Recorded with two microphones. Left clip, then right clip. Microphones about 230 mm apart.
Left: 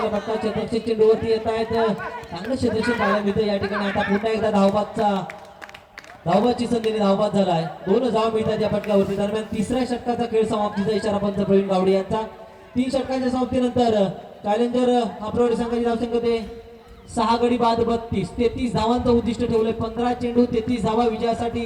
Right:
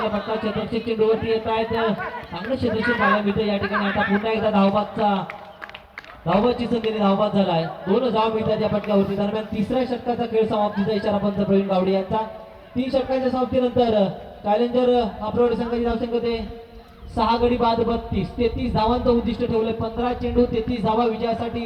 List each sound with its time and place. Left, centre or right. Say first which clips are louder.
0.0 s speech: left 1 dB; left
6.2 s a man's voice: left 1 dB; left